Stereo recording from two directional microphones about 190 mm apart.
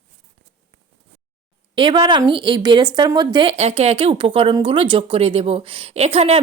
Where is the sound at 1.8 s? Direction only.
25° right (ahead or behind).